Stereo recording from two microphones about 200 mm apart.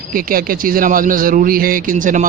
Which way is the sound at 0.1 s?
45° right (ahead or behind).